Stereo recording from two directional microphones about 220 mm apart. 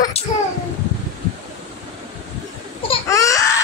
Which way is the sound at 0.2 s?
30° left (ahead or behind).